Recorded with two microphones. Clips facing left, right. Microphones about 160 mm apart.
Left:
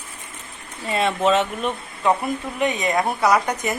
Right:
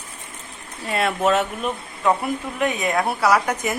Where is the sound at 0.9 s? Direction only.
5° right (ahead or behind).